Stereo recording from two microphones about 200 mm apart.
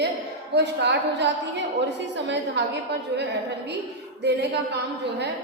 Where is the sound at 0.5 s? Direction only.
60° right (ahead or behind).